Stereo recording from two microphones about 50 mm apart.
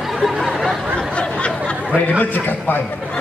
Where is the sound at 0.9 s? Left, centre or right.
Centre.